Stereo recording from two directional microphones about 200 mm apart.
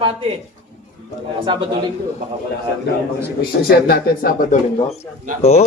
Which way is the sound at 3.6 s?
50° left (ahead or behind).